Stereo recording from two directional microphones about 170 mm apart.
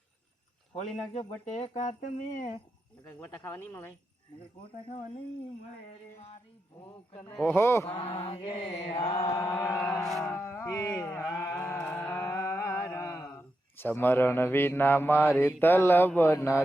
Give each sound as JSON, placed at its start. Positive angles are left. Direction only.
{"t": 1.5, "sound": "speech", "side_deg": 40}
{"t": 3.0, "sound": "mantra", "side_deg": 10}
{"t": 7.4, "sound": "mantra", "side_deg": 15}
{"t": 7.9, "sound": "mantra", "side_deg": 35}
{"t": 9.0, "sound": "mantra", "side_deg": 25}
{"t": 11.3, "sound": "a sound", "side_deg": 10}